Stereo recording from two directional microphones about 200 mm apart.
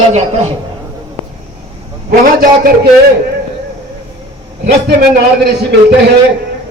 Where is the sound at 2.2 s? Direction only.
45° right (ahead or behind).